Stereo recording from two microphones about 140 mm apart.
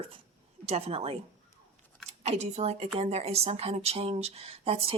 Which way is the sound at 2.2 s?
50° right (ahead or behind).